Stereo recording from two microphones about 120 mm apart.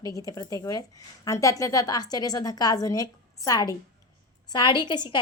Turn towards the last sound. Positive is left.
turn(degrees=40)  # may be behind; listen again after turning